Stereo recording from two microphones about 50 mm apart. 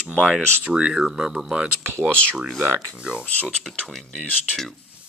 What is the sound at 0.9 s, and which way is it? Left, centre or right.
Speech, centre.